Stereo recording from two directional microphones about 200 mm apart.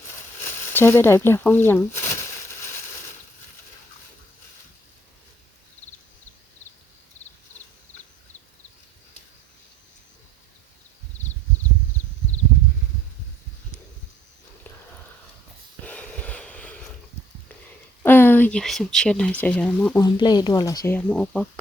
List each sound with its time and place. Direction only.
0.4 s speech: 10° left (ahead or behind)
15.8 s a sound: 5° left (ahead or behind)
18.0 s speech: 10° left (ahead or behind)
20.0 s speech: 20° left (ahead or behind)